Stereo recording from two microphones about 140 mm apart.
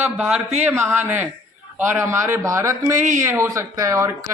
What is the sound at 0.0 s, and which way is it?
Speech, 5° right (ahead or behind).